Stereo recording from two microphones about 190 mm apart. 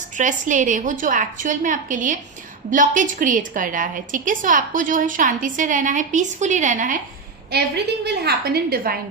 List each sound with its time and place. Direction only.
0.2 s a woman's voice: 40° right (ahead or behind)
8.0 s a woman's voice: 60° right (ahead or behind)